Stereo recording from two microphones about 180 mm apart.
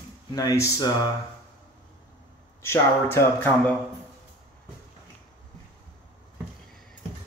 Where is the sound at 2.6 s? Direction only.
15° left (ahead or behind).